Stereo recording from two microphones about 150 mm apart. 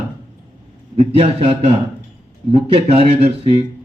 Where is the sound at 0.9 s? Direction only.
40° right (ahead or behind).